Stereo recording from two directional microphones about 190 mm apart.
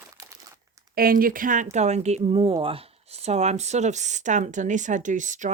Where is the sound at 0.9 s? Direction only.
50° right (ahead or behind).